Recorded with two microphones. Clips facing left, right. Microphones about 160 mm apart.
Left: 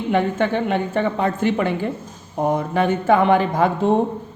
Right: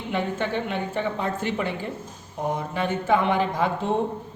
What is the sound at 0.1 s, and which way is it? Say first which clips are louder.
Speech: left 7 dB; 60° left (ahead or behind).